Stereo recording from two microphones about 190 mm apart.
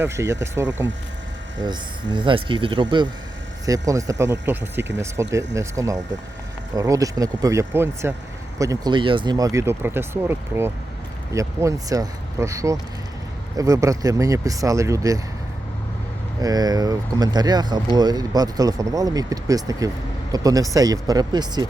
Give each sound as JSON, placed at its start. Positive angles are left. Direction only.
{"t": 0.0, "sound": "speech", "side_deg": -15}
{"t": 16.4, "sound": "speech", "side_deg": -20}